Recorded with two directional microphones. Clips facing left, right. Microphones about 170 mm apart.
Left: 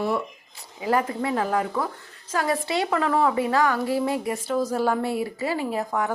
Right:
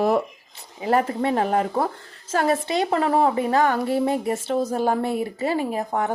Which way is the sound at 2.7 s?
25° right (ahead or behind).